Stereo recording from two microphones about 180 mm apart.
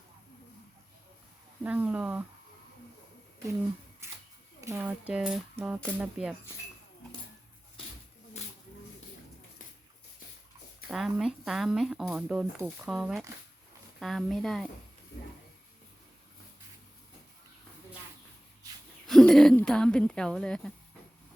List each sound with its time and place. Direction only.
1.6 s speech: 10° right (ahead or behind)
4.0 s a sound: 15° right (ahead or behind)
4.6 s speech: 10° right (ahead or behind)
10.8 s speech: centre (ahead or behind)
19.0 s speech: 5° left (ahead or behind)